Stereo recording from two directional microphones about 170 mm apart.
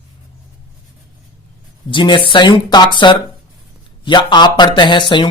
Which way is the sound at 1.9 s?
30° left (ahead or behind).